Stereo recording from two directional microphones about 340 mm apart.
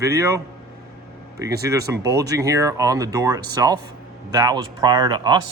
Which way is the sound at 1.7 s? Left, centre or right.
Centre.